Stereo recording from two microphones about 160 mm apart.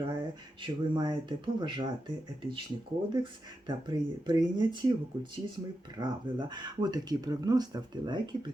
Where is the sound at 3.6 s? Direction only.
30° right (ahead or behind).